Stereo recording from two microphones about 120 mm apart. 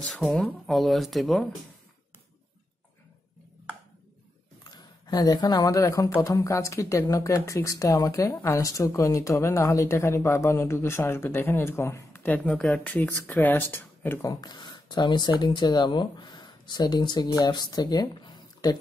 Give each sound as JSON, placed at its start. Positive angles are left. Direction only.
{"t": 0.0, "sound": "speech", "side_deg": 0}
{"t": 4.6, "sound": "a woman's voice", "side_deg": 35}
{"t": 14.4, "sound": "speech", "side_deg": 40}